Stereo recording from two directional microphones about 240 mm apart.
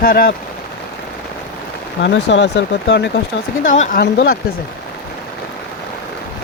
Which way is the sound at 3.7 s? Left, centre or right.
Left.